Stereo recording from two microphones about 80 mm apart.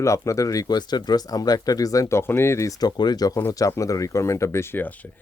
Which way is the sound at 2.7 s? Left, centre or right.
Left.